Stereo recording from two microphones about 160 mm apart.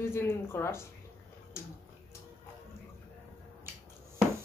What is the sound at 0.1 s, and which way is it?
Speech, 15° left (ahead or behind).